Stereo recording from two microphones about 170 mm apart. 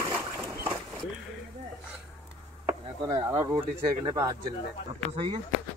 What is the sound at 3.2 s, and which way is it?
Speech, 20° right (ahead or behind).